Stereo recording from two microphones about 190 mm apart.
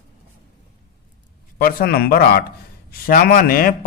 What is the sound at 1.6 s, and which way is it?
Speech, 50° left (ahead or behind).